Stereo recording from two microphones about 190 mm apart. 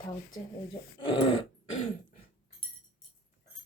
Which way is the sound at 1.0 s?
25° left (ahead or behind).